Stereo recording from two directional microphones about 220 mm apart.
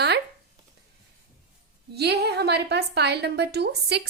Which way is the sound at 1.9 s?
45° right (ahead or behind).